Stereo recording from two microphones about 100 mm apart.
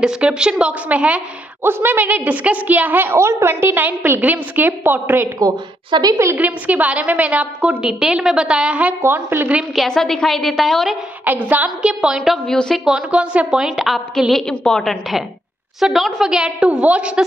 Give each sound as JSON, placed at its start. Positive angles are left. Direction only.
{"t": 0.0, "sound": "a woman's voice", "side_deg": -5}
{"t": 5.4, "sound": "a woman's voice", "side_deg": -45}
{"t": 6.3, "sound": "a woman's voice", "side_deg": -15}
{"t": 9.0, "sound": "a woman's voice", "side_deg": -25}
{"t": 9.8, "sound": "a woman's voice", "side_deg": 5}
{"t": 11.2, "sound": "a woman's voice", "side_deg": -15}
{"t": 12.2, "sound": "a woman's voice", "side_deg": 5}
{"t": 12.9, "sound": "a woman's voice", "side_deg": -10}